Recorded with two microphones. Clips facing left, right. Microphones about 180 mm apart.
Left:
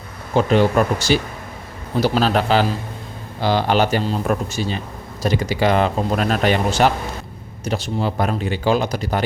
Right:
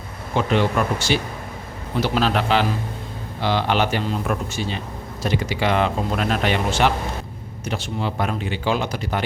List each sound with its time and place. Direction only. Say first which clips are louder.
0.3 s speech: left 4 dB; 40° left (ahead or behind)